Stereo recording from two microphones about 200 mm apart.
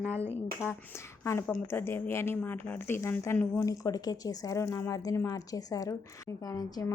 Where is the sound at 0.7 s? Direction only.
15° left (ahead or behind).